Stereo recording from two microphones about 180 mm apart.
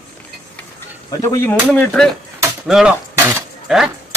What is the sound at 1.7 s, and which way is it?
Speech, 5° left (ahead or behind).